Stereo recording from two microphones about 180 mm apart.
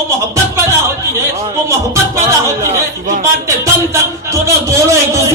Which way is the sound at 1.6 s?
15° right (ahead or behind).